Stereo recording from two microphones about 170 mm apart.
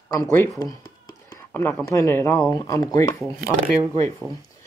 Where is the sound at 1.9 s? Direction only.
15° left (ahead or behind).